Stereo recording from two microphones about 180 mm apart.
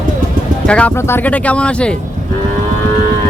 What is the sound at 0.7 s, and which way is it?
Speech, 10° left (ahead or behind).